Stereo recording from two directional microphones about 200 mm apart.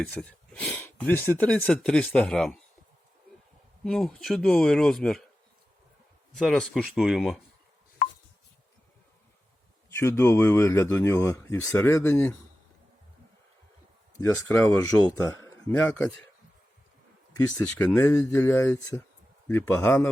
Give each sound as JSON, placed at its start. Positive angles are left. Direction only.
{"t": 0.0, "sound": "speech", "side_deg": 5}
{"t": 3.8, "sound": "speech", "side_deg": 5}
{"t": 6.3, "sound": "speech", "side_deg": 0}
{"t": 10.0, "sound": "speech", "side_deg": 15}
{"t": 14.5, "sound": "speech", "side_deg": 15}
{"t": 17.3, "sound": "speech", "side_deg": 10}